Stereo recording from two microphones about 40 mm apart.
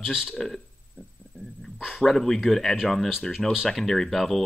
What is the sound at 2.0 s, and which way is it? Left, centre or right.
Speech, centre.